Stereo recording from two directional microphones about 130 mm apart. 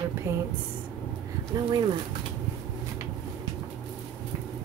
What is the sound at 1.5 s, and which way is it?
Speech, 35° right (ahead or behind).